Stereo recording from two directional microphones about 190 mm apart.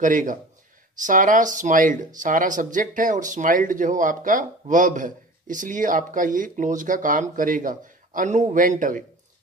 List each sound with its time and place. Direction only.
0.0 s speech: 45° right (ahead or behind)